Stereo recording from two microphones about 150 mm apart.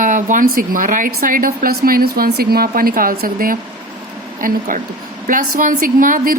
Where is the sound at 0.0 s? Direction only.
60° right (ahead or behind).